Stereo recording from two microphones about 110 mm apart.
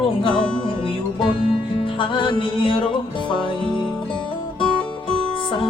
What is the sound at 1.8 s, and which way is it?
Music, 50° left (ahead or behind).